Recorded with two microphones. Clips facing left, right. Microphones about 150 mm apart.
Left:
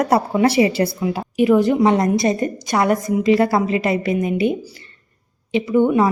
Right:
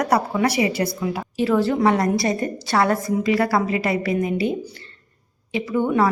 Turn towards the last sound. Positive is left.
turn(degrees=20)  # may be behind; listen again after turning